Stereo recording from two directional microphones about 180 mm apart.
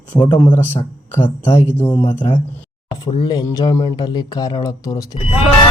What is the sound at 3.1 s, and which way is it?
Speech, 25° left (ahead or behind).